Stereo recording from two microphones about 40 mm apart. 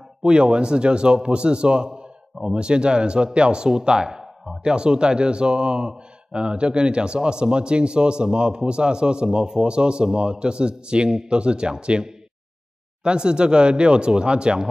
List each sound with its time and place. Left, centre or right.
0.2 s speech: right